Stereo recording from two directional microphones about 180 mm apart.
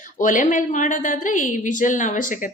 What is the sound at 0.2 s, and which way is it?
A woman's voice, 45° left (ahead or behind).